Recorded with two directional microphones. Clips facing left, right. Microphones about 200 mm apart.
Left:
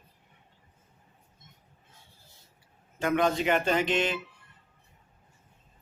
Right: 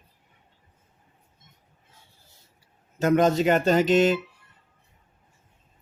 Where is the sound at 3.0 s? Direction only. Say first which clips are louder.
Right 6 dB; 40° right (ahead or behind).